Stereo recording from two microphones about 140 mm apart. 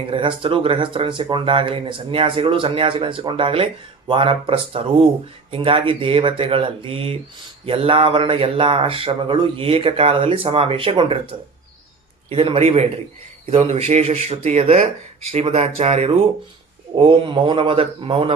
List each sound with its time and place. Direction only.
0.1 s speech: 40° right (ahead or behind)
16.9 s speech: 35° right (ahead or behind)